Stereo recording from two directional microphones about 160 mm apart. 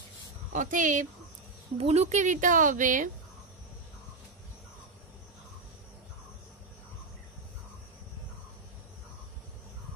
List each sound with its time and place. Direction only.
0.5 s speech: 55° right (ahead or behind)
1.8 s speech: 40° right (ahead or behind)